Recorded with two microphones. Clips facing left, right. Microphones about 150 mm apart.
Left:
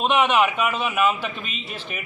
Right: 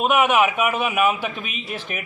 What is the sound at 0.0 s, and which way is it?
A man's voice, 10° right (ahead or behind).